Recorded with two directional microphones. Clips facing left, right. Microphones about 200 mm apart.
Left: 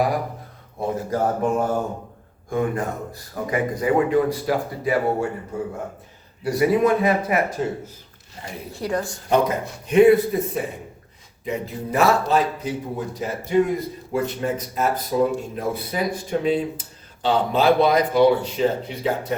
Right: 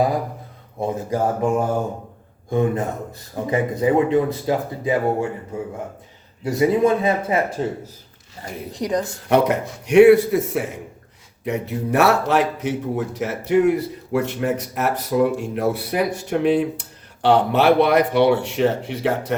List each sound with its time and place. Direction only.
0.8 s speech: 15° right (ahead or behind)
6.4 s speech: 25° right (ahead or behind)
8.7 s speech: 15° right (ahead or behind)
9.3 s a man's voice: 75° right (ahead or behind)
11.4 s a man's voice: 70° right (ahead or behind)